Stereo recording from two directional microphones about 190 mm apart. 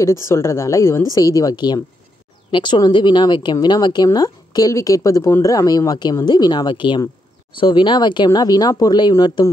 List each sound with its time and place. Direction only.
0.0 s a woman's voice: 15° left (ahead or behind)